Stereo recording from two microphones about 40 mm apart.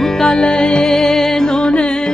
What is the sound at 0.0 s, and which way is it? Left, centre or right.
Music, centre.